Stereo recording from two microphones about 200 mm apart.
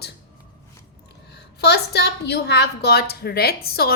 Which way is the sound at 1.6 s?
55° left (ahead or behind).